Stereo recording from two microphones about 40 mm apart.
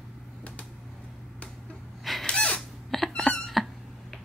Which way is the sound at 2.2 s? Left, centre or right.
Left.